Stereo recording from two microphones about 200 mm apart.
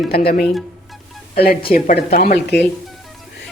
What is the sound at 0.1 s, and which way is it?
Speech, 50° left (ahead or behind).